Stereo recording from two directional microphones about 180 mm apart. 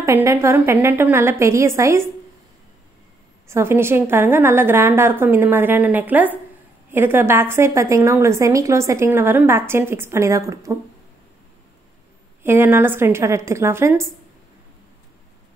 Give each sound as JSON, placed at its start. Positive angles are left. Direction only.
{"t": 0.0, "sound": "a woman's voice", "side_deg": -15}
{"t": 3.4, "sound": "a woman's voice", "side_deg": -15}
{"t": 12.4, "sound": "a woman's voice", "side_deg": -10}